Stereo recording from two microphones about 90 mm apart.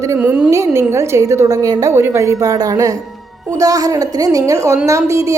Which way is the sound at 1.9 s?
30° right (ahead or behind).